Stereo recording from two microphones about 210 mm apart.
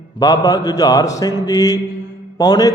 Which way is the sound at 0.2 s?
20° left (ahead or behind).